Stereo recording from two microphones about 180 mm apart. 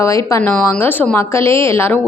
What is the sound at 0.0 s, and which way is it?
Speech, 15° left (ahead or behind).